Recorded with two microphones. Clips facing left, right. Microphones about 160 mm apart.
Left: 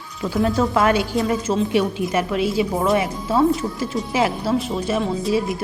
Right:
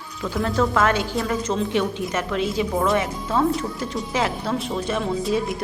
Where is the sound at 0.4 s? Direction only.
15° left (ahead or behind).